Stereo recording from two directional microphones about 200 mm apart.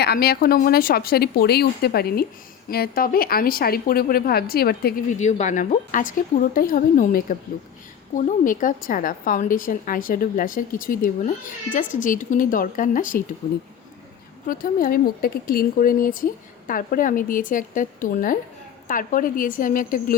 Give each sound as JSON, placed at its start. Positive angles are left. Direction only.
{"t": 0.0, "sound": "a woman's voice", "side_deg": 50}
{"t": 5.2, "sound": "a woman's voice", "side_deg": 40}
{"t": 14.4, "sound": "a woman's voice", "side_deg": 45}